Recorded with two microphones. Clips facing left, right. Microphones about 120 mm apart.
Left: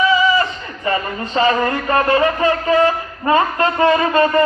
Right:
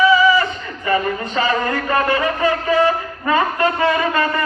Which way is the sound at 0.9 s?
30° left (ahead or behind).